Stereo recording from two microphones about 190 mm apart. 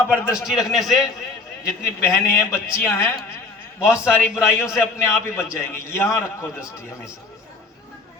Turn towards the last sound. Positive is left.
turn(degrees=15)  # may be behind; listen again after turning